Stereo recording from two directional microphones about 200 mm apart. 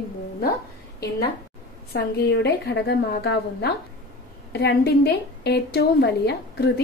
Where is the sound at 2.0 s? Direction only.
55° left (ahead or behind).